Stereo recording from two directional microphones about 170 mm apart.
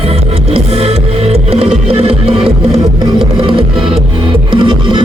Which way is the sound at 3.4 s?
30° right (ahead or behind).